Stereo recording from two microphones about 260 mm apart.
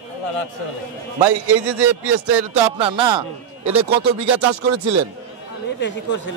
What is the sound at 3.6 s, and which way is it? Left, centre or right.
A man's voice, right.